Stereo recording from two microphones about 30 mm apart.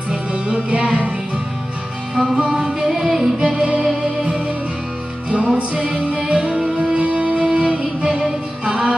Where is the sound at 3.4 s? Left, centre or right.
Right.